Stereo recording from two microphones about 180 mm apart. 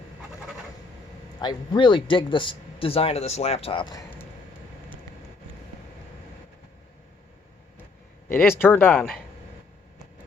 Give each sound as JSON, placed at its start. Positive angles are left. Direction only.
{"t": 1.4, "sound": "speech", "side_deg": 25}
{"t": 8.3, "sound": "speech", "side_deg": 10}